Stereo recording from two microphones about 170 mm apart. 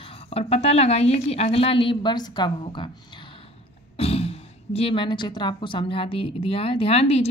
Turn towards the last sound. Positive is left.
turn(degrees=35)  # may be behind; listen again after turning